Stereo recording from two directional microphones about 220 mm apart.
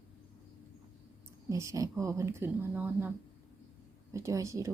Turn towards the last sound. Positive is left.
turn(degrees=-15)  # may be behind; listen again after turning